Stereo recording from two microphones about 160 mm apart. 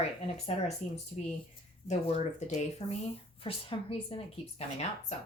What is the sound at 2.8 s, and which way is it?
Speech, 30° left (ahead or behind).